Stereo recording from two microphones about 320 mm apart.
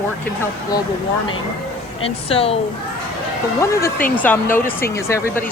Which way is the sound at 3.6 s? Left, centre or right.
Centre.